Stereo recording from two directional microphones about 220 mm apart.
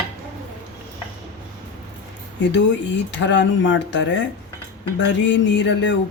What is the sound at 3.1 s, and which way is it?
A woman's voice, 55° left (ahead or behind).